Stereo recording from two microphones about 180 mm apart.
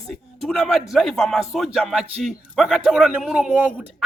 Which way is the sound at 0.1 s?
Centre (ahead or behind).